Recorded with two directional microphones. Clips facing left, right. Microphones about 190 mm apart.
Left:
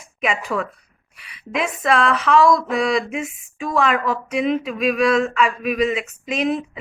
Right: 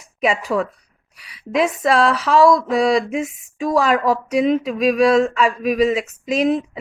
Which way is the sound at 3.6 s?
35° right (ahead or behind).